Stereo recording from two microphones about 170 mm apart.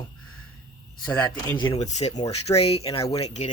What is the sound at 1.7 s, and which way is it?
Speech, 40° left (ahead or behind).